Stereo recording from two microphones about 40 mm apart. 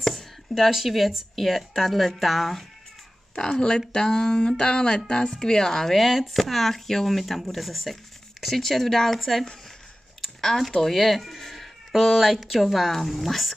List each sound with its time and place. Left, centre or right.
0.0 s a sound: centre
0.7 s speech: centre
3.3 s speech: centre